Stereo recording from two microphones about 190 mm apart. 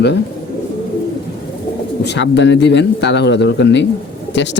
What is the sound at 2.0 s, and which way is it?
A man's voice, 65° left (ahead or behind).